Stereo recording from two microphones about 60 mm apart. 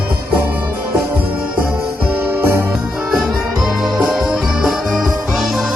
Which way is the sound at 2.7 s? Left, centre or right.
Centre.